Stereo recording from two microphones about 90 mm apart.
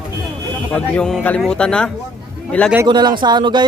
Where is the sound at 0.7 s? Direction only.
10° left (ahead or behind).